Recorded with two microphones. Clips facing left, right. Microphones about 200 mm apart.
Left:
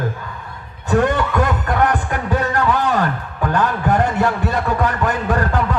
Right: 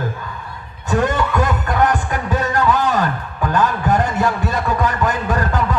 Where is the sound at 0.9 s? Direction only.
60° left (ahead or behind).